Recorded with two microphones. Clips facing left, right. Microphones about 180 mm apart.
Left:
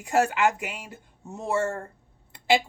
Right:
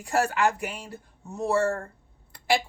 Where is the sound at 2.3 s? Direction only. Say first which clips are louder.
Left 2 dB; 20° left (ahead or behind).